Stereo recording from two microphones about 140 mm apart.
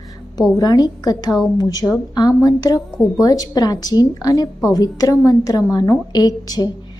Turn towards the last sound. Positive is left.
turn(degrees=30)  # may be behind; listen again after turning